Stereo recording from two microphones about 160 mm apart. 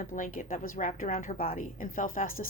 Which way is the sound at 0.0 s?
55° left (ahead or behind).